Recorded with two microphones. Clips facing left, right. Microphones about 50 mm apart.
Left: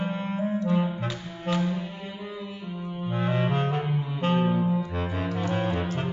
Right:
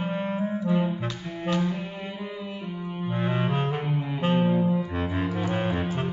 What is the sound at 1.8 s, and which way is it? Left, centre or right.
Music, right.